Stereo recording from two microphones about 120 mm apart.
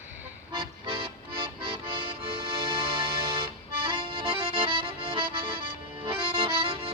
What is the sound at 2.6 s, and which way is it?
Accordion, 50° right (ahead or behind).